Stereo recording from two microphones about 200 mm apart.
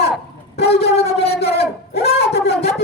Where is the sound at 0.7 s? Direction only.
30° left (ahead or behind).